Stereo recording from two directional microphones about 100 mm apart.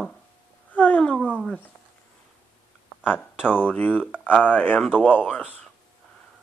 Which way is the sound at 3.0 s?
15° left (ahead or behind).